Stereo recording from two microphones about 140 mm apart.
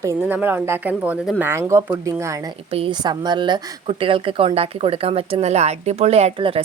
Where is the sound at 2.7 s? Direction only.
40° right (ahead or behind).